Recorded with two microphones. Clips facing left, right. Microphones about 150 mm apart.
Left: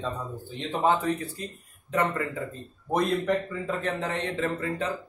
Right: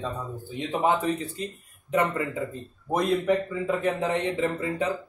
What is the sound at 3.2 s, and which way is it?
Speech, 5° right (ahead or behind).